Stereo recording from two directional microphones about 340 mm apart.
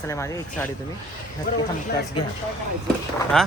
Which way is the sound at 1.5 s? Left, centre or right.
Left.